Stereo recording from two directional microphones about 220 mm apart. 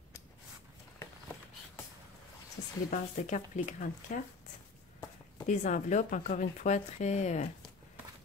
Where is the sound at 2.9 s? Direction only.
35° left (ahead or behind).